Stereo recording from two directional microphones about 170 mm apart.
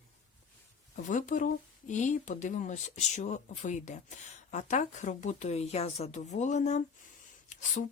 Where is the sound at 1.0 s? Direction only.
50° left (ahead or behind).